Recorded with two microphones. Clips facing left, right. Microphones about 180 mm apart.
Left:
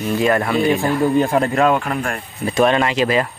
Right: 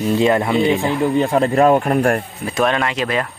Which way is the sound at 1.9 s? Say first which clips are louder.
Right 7 dB; 45° right (ahead or behind).